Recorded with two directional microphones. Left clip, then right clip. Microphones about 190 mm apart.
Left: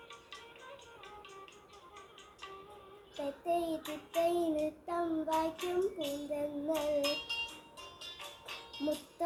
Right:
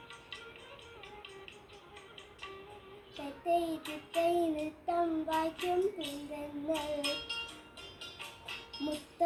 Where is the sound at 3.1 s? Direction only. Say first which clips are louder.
Right 2 dB; 20° left (ahead or behind).